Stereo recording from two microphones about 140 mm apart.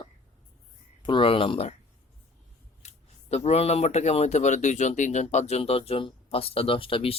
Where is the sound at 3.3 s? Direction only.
50° left (ahead or behind).